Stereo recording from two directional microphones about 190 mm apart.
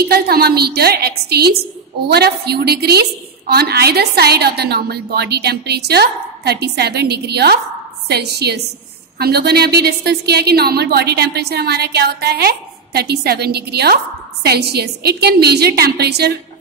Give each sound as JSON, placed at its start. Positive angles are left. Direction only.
{"t": 0.0, "sound": "a woman's voice", "side_deg": -55}